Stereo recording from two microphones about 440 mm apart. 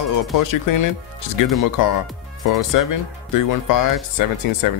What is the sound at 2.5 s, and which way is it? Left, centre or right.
Speech, left.